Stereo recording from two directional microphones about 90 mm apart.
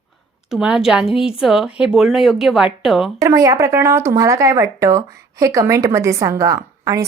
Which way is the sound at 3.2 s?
35° right (ahead or behind).